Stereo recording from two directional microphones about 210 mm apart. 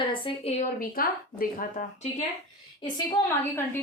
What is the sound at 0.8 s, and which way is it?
Speech, 45° left (ahead or behind).